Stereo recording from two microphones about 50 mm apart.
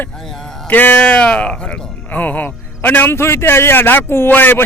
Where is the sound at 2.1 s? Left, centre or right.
Left.